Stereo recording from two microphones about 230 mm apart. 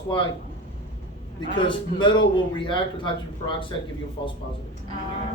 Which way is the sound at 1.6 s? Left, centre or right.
Centre.